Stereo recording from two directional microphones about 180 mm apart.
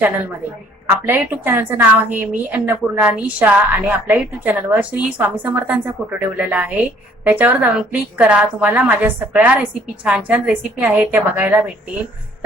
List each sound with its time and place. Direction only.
0.9 s a woman's voice: 10° right (ahead or behind)